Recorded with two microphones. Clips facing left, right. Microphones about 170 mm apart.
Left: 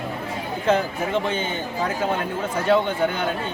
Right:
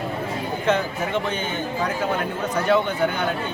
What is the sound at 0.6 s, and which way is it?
Speech, 30° left (ahead or behind).